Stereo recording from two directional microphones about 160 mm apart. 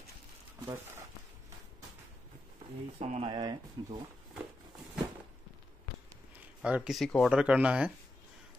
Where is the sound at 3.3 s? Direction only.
25° right (ahead or behind).